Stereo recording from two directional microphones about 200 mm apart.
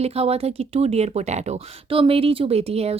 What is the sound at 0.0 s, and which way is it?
Speech, 30° right (ahead or behind).